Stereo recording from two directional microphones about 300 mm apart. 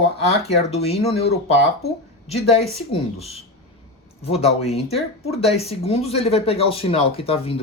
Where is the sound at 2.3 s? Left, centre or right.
Left.